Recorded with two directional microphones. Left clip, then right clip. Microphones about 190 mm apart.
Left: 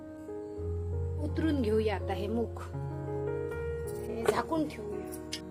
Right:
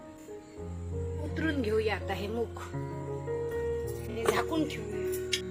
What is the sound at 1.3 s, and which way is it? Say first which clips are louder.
A woman's voice: even; 50° left (ahead or behind).